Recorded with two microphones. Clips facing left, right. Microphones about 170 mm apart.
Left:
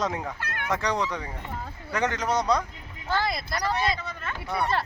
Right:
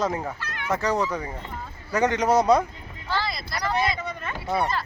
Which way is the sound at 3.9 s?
15° right (ahead or behind).